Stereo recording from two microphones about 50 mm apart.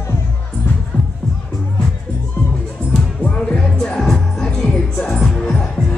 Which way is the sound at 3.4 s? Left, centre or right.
Centre.